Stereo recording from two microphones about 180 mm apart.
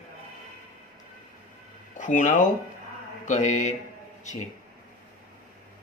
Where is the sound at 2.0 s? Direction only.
45° left (ahead or behind).